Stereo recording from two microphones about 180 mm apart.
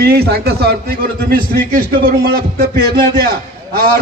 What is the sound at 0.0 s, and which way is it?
A man's voice, 60° right (ahead or behind).